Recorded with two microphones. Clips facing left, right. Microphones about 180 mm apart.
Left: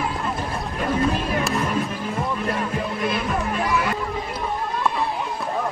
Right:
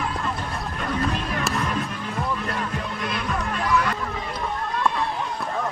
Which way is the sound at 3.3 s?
20° left (ahead or behind).